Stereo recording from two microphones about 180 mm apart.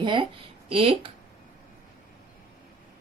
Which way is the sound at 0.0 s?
25° right (ahead or behind).